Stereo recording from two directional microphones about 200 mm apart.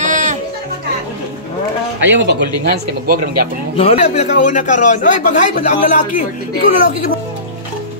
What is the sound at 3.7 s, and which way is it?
A man's voice, 30° left (ahead or behind).